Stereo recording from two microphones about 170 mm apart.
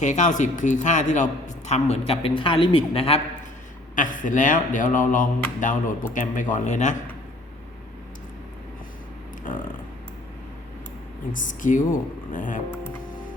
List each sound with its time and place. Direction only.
0.0 s a man's voice: 45° left (ahead or behind)
3.9 s a man's voice: 50° left (ahead or behind)
9.4 s a sound: 50° left (ahead or behind)
11.3 s a man's voice: 50° left (ahead or behind)